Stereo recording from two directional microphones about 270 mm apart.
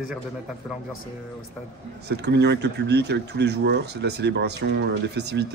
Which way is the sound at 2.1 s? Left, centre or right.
Right.